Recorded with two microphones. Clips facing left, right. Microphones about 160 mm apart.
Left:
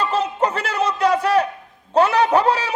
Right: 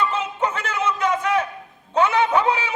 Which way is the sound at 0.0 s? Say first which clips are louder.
Left 3 dB; 35° left (ahead or behind).